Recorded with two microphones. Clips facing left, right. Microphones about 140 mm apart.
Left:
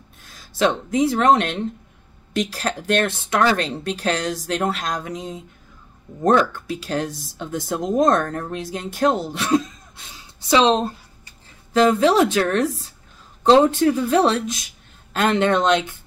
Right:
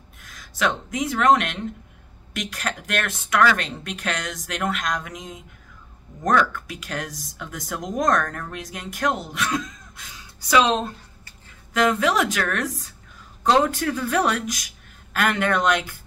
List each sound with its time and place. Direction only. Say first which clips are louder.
0.2 s speech: left 5 dB; 30° left (ahead or behind)